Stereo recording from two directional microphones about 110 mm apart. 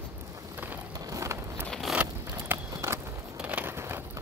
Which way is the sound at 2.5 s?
25° right (ahead or behind).